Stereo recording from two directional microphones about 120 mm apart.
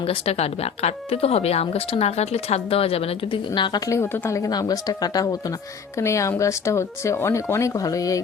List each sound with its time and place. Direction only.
0.0 s speech: 55° left (ahead or behind); by 8.2 s 30° left (ahead or behind)